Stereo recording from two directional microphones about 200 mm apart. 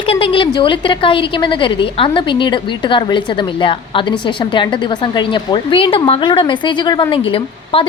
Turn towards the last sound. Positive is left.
turn(degrees=25)  # may be behind; listen again after turning